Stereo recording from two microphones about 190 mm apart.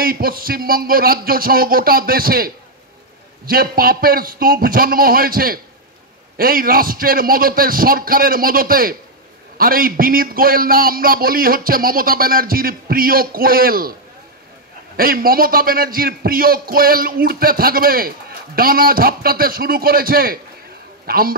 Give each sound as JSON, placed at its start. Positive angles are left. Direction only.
{"t": 0.0, "sound": "a man's voice", "side_deg": -50}
{"t": 15.0, "sound": "a man's voice", "side_deg": -50}